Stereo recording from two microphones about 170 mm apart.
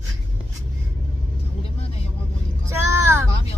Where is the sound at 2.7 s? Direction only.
15° right (ahead or behind).